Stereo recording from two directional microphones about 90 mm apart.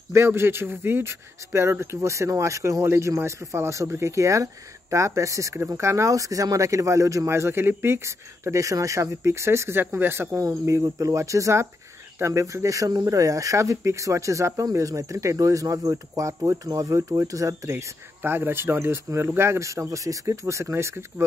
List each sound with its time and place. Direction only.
0.1 s speech: 25° right (ahead or behind)